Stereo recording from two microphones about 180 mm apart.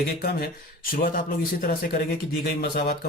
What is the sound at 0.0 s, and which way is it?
Speech, 60° left (ahead or behind).